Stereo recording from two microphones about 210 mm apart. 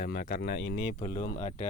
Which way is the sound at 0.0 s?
45° left (ahead or behind).